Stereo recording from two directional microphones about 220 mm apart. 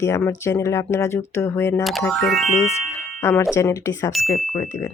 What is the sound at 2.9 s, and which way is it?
Music, 10° left (ahead or behind).